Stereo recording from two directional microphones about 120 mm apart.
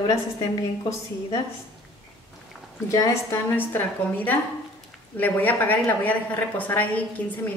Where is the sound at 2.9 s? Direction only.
25° left (ahead or behind).